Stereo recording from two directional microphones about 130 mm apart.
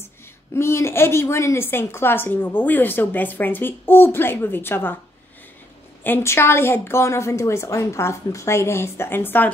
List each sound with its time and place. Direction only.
0.6 s a woman's voice: 20° left (ahead or behind)
6.0 s a woman's voice: 20° left (ahead or behind)